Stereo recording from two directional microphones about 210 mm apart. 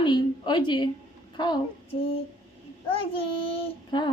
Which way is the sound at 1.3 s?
20° left (ahead or behind).